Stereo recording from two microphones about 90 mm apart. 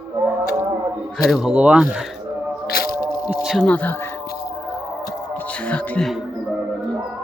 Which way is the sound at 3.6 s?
15° left (ahead or behind).